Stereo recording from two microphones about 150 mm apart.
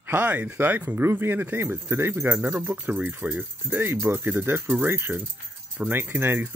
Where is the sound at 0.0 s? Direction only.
10° right (ahead or behind).